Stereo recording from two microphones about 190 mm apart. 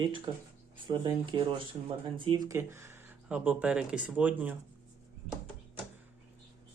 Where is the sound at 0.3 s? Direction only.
20° right (ahead or behind).